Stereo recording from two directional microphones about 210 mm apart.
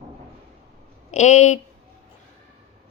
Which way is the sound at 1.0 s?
35° left (ahead or behind).